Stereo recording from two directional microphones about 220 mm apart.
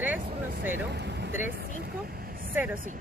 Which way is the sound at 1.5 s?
45° right (ahead or behind).